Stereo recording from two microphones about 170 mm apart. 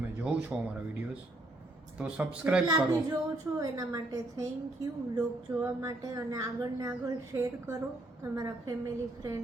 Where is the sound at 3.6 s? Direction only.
20° right (ahead or behind).